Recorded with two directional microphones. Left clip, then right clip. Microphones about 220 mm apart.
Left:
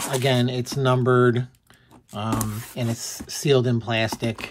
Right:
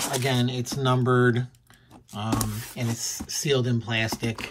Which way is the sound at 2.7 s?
20° left (ahead or behind).